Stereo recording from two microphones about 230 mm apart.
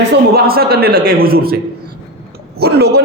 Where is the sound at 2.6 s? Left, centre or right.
Right.